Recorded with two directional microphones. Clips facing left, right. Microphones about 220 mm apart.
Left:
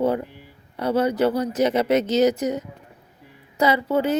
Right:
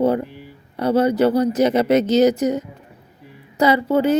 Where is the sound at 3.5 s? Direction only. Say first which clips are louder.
Right 4 dB; 40° right (ahead or behind).